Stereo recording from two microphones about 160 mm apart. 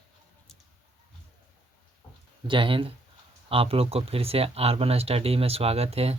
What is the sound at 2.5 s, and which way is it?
Speech, 30° right (ahead or behind).